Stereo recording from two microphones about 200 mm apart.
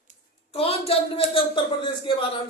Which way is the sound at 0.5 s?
30° left (ahead or behind).